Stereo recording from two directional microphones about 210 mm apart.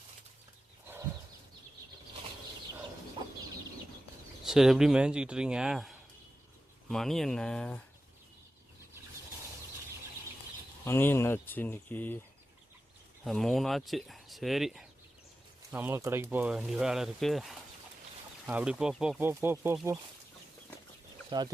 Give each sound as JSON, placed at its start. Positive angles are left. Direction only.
{"t": 4.4, "sound": "speech", "side_deg": 0}
{"t": 10.8, "sound": "speech", "side_deg": 10}
{"t": 13.2, "sound": "speech", "side_deg": 0}
{"t": 21.2, "sound": "speech", "side_deg": -20}